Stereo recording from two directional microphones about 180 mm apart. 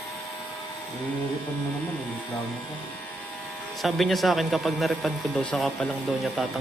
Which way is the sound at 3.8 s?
Centre (ahead or behind).